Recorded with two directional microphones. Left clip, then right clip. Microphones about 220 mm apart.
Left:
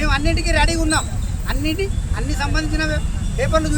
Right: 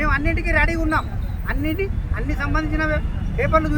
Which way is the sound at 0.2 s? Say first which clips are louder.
Left 1 dB; 20° left (ahead or behind).